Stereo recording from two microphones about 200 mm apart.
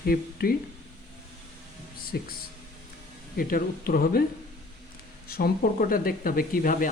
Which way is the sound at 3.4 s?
45° left (ahead or behind).